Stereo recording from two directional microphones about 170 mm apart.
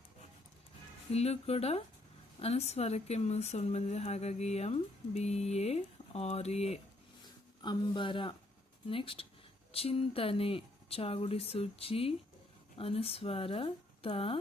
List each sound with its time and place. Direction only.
1.1 s speech: 40° left (ahead or behind)
7.6 s speech: 30° left (ahead or behind)